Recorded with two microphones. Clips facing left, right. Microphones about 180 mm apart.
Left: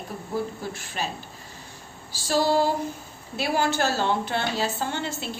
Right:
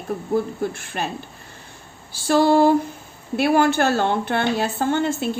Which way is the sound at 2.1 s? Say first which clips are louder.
Right 6 dB; 55° right (ahead or behind).